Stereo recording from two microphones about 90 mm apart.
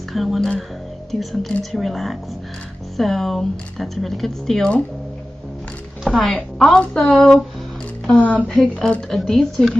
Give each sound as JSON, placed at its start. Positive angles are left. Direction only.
{"t": 0.1, "sound": "speech", "side_deg": 0}
{"t": 6.0, "sound": "speech", "side_deg": 0}
{"t": 6.8, "sound": "speech", "side_deg": 10}
{"t": 7.1, "sound": "speech", "side_deg": 0}
{"t": 8.1, "sound": "speech", "side_deg": 15}
{"t": 8.5, "sound": "speech", "side_deg": 5}